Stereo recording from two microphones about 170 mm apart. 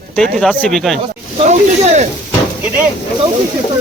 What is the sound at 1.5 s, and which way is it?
Speech, 45° right (ahead or behind).